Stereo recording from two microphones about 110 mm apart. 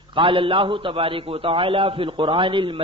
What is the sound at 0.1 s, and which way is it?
A man's voice, 50° right (ahead or behind).